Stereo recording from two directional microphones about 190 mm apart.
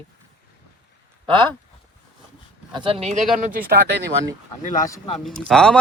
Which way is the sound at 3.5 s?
50° right (ahead or behind).